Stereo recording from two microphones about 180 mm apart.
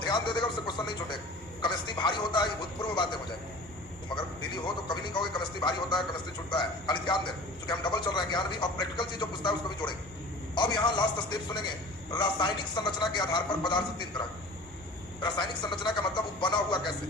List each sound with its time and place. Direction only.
0.0 s speech: 25° left (ahead or behind)
15.2 s speech: 25° left (ahead or behind)